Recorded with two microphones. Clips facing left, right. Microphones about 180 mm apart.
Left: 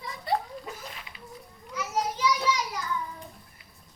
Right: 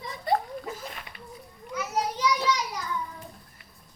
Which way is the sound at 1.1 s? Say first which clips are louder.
Right 3 dB; 55° right (ahead or behind).